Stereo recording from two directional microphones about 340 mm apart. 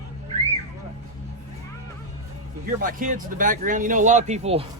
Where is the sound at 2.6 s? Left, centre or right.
Right.